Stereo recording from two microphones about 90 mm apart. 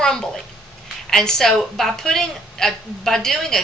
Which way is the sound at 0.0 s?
5° left (ahead or behind).